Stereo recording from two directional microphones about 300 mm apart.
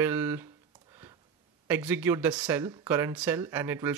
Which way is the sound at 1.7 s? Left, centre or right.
Centre.